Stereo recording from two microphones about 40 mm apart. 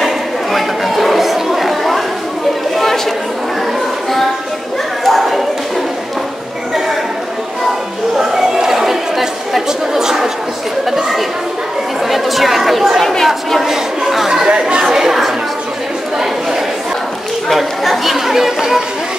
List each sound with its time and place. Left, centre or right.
0.0 s chatter: centre
5.0 s a sound: centre
8.2 s chatter: centre
13.0 s chatter: centre
13.7 s chatter: centre
14.5 s chatter: right
15.0 s a sound: centre
17.5 s chatter: centre